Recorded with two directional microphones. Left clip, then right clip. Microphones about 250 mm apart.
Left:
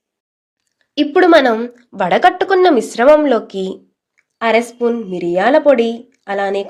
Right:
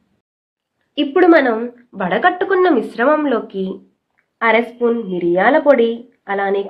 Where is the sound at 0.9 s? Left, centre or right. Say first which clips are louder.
Left 2 dB; left.